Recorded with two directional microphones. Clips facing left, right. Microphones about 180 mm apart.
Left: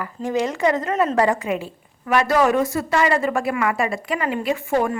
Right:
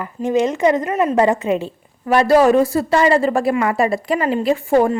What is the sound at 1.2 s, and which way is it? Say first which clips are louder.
A woman's voice: right 4 dB; 25° right (ahead or behind).